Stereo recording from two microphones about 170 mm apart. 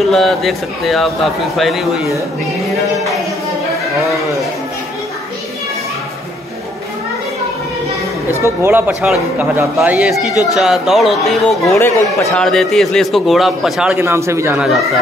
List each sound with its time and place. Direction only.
0.0 s a man's voice: centre (ahead or behind)
8.3 s a man's voice: 15° right (ahead or behind); by 11.5 s centre (ahead or behind)
11.6 s speech: 20° left (ahead or behind)
12.4 s a man's voice: centre (ahead or behind); by 14.6 s 15° right (ahead or behind)